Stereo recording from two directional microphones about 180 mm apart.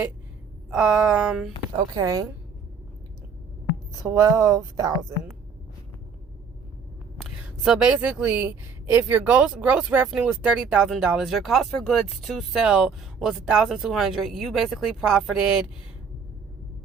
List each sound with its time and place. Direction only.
0.7 s speech: 5° right (ahead or behind)
1.7 s speech: 20° right (ahead or behind)
4.0 s a woman's voice: 20° right (ahead or behind)
7.2 s speech: 5° right (ahead or behind)